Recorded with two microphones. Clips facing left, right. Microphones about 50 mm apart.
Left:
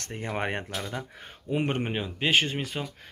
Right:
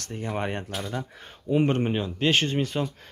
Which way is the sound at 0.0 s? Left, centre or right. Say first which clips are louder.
Right 1 dB; left.